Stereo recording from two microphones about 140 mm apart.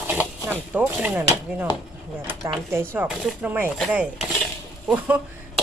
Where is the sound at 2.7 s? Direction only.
15° right (ahead or behind).